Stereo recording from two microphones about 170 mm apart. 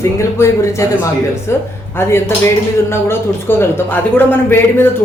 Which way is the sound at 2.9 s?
15° left (ahead or behind).